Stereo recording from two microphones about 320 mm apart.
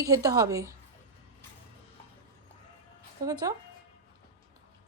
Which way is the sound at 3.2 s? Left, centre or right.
Centre.